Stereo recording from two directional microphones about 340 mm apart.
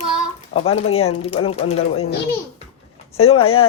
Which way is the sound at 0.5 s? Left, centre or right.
Centre.